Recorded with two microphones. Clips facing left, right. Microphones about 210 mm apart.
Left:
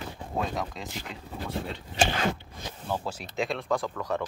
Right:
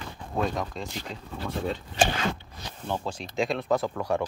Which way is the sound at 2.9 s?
5° left (ahead or behind).